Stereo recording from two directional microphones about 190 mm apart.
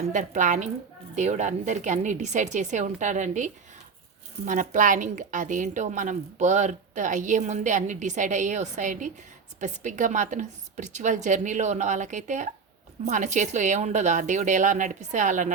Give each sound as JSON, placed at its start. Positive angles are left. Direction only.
{"t": 0.1, "sound": "a woman's voice", "side_deg": -40}